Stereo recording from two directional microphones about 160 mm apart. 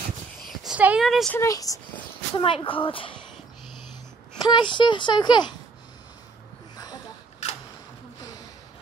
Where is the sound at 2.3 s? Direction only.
35° left (ahead or behind).